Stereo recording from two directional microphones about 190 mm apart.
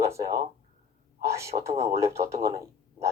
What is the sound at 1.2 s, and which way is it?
Speech, 15° right (ahead or behind).